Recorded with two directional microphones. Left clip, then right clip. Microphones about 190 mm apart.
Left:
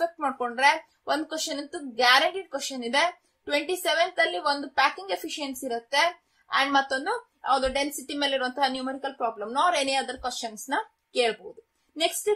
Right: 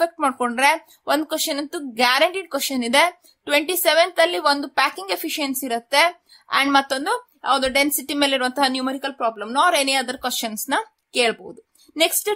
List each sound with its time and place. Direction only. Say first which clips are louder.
0.0 s speech: right 7 dB; 40° right (ahead or behind)